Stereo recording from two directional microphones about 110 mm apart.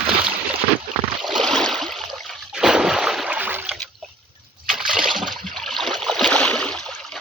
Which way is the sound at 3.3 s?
15° right (ahead or behind).